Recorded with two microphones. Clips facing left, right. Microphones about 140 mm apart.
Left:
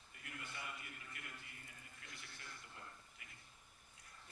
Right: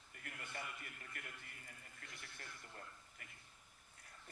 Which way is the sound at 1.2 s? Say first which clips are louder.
Right 4 dB; 50° right (ahead or behind).